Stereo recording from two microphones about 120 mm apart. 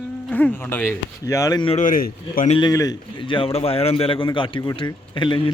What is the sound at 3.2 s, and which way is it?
A man's voice, 45° left (ahead or behind).